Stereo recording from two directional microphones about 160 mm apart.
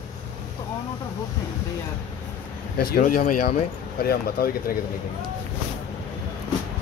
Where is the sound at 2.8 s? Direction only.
70° left (ahead or behind).